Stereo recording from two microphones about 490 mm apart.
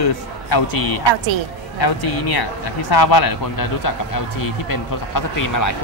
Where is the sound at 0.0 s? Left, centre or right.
Left.